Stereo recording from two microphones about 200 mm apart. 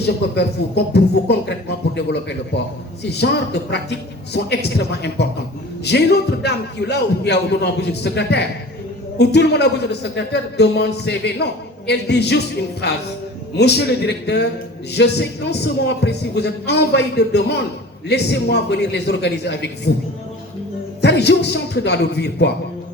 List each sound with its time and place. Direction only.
0.0 s a man's voice: 55° left (ahead or behind)
21.0 s a man's voice: 55° left (ahead or behind)